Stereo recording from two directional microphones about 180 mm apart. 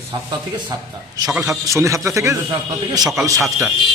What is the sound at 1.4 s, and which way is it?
A man's voice, 15° right (ahead or behind).